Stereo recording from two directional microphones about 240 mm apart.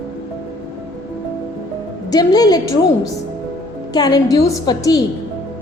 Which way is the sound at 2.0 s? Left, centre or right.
Centre.